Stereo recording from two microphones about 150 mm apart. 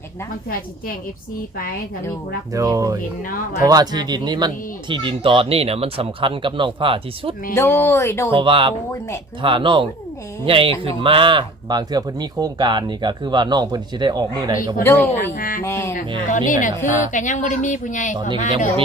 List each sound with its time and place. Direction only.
2.5 s a man's voice: 20° right (ahead or behind)
7.5 s speech: 15° left (ahead or behind)
8.3 s a man's voice: 35° right (ahead or behind)
14.8 s speech: 15° left (ahead or behind)
15.3 s speech: 65° left (ahead or behind)
15.6 s speech: 15° left (ahead or behind)
16.3 s a woman's voice: 60° left (ahead or behind)